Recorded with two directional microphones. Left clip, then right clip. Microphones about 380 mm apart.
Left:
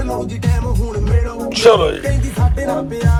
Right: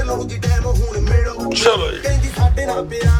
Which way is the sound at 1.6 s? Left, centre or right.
Centre.